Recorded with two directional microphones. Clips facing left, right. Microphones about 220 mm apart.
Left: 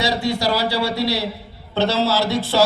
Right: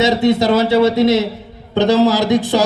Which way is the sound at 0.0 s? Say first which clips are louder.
Right 8 dB; 20° right (ahead or behind).